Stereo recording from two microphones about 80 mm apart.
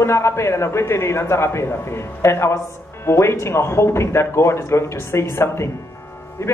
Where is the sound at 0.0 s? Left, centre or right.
Left.